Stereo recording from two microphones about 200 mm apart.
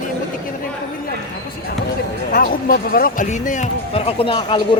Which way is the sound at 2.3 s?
45° left (ahead or behind).